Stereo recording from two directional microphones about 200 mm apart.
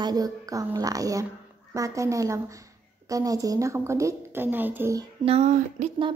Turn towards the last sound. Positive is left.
turn(degrees=-35)  # may be behind; listen again after turning